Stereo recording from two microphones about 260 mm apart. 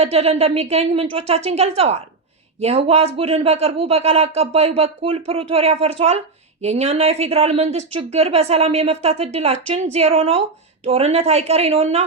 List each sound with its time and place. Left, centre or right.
0.0 s speech: right